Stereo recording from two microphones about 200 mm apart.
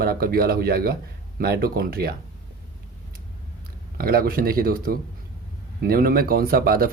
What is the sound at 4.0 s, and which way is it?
Speech, 45° right (ahead or behind).